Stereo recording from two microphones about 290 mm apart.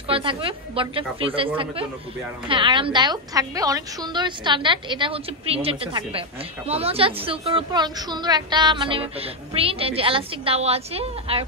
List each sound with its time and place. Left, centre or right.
0.1 s a woman's voice: centre